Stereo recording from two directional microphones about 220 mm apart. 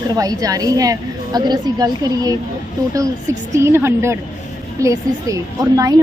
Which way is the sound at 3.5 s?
10° right (ahead or behind).